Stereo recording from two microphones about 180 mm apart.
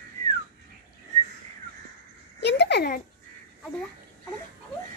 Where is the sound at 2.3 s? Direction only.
70° left (ahead or behind).